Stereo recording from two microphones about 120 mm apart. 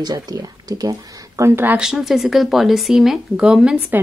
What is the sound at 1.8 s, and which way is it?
Speech, 5° right (ahead or behind).